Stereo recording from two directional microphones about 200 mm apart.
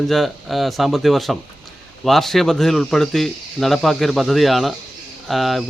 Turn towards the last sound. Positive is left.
turn(degrees=0)  # may be behind; listen again after turning